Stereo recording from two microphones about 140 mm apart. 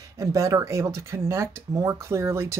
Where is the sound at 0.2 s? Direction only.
25° right (ahead or behind).